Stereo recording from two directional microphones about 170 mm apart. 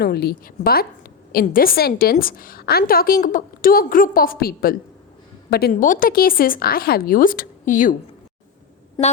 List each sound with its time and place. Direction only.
0.0 s a woman's voice: 70° left (ahead or behind); by 7.9 s 50° left (ahead or behind)
9.0 s a woman's voice: 25° left (ahead or behind)